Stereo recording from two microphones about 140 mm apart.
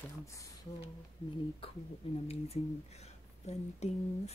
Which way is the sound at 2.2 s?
50° left (ahead or behind).